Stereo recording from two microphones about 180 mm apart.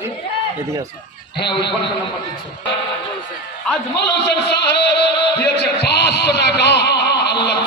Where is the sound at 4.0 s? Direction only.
70° left (ahead or behind).